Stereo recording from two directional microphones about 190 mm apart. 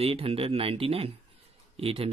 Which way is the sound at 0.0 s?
30° right (ahead or behind).